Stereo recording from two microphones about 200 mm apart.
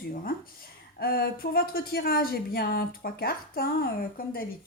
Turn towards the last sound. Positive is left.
turn(degrees=50)  # may be behind; listen again after turning